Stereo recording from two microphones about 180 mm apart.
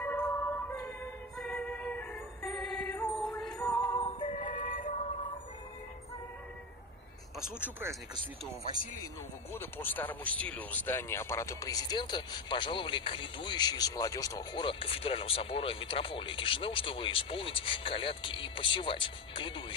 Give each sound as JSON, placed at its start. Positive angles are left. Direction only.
{"t": 0.0, "sound": "music", "side_deg": 10}
{"t": 3.7, "sound": "music", "side_deg": 15}
{"t": 4.0, "sound": "music", "side_deg": 35}
{"t": 9.5, "sound": "speech", "side_deg": 10}